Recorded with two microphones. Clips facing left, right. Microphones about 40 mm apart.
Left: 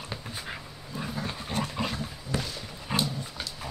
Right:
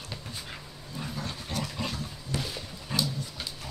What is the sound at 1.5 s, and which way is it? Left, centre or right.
Vehicle, left.